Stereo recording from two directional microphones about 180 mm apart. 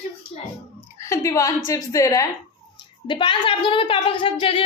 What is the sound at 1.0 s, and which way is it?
A woman's voice, 15° left (ahead or behind).